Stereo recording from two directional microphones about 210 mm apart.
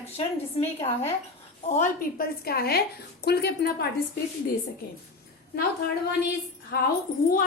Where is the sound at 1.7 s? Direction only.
40° left (ahead or behind).